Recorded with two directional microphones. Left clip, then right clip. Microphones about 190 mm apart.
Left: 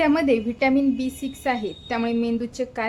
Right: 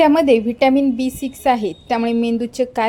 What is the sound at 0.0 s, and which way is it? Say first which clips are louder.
A woman's voice: right 7 dB; 25° right (ahead or behind).